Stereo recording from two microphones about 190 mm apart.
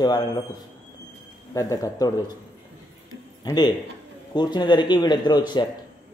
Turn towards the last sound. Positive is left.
turn(degrees=20)  # may be behind; listen again after turning